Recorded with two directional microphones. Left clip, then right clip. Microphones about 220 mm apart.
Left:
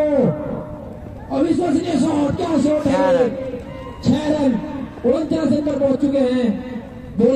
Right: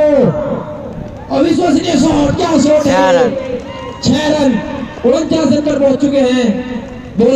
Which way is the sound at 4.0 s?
40° right (ahead or behind).